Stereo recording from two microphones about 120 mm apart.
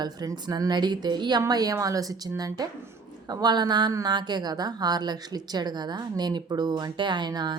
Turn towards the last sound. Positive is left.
turn(degrees=-40)  # may be behind; listen again after turning